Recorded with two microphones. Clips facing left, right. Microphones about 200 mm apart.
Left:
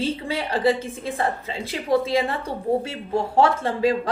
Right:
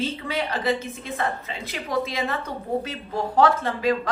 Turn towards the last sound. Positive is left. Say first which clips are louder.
# left 2 dB
turn(degrees=30)  # may be behind; listen again after turning